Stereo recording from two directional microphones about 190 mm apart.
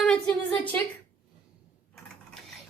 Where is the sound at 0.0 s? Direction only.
5° left (ahead or behind).